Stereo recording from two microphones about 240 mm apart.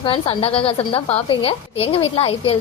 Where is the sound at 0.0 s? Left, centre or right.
Left.